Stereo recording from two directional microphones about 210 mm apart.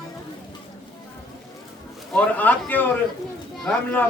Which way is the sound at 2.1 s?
5° left (ahead or behind).